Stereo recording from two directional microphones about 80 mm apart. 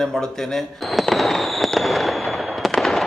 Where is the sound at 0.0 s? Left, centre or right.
Centre.